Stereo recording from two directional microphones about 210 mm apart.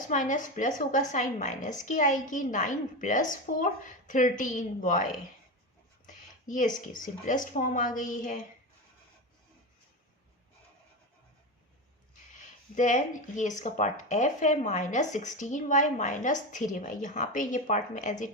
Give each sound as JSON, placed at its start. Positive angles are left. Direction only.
{"t": 0.1, "sound": "speech", "side_deg": 35}
{"t": 6.1, "sound": "speech", "side_deg": 40}
{"t": 12.3, "sound": "speech", "side_deg": 35}